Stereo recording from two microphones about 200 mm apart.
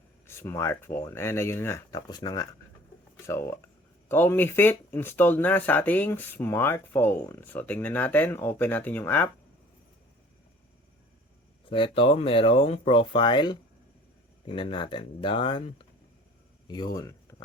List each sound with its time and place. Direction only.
0.3 s speech: 15° left (ahead or behind)
11.7 s speech: 25° left (ahead or behind)